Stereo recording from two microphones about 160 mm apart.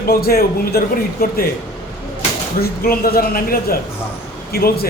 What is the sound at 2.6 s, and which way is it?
A woman's voice, 70° left (ahead or behind).